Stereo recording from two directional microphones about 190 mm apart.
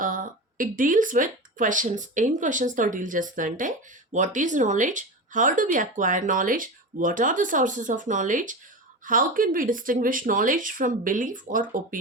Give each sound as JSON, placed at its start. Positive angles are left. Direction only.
{"t": 0.0, "sound": "speech", "side_deg": -45}